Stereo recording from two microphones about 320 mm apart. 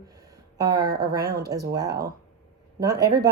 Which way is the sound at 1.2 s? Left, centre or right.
Right.